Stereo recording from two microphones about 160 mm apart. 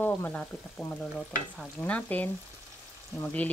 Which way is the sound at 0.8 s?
10° left (ahead or behind).